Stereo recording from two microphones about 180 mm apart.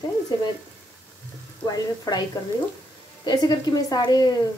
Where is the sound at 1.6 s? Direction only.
20° left (ahead or behind).